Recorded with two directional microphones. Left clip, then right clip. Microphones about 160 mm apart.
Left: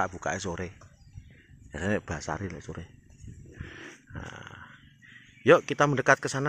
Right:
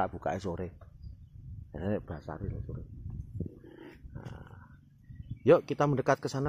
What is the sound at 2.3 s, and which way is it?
Speech, 40° left (ahead or behind).